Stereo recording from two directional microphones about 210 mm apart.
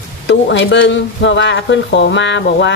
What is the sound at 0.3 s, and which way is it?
Speech, 55° left (ahead or behind).